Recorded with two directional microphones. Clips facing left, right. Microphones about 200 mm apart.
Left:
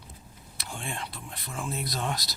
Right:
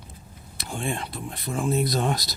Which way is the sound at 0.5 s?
45° right (ahead or behind).